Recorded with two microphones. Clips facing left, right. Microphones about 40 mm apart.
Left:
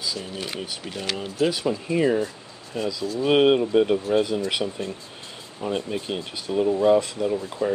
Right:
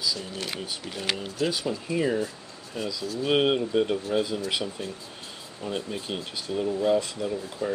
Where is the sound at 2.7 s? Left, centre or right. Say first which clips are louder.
Left 5 dB; centre.